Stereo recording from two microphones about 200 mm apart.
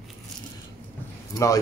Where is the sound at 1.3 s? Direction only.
15° left (ahead or behind).